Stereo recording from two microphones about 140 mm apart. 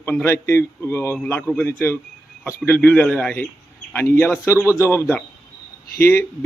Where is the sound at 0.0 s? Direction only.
15° left (ahead or behind).